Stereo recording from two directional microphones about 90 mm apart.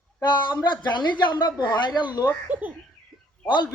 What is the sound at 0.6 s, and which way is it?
A woman's voice, 55° left (ahead or behind).